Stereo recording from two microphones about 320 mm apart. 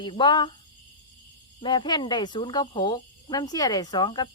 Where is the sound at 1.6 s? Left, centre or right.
Centre.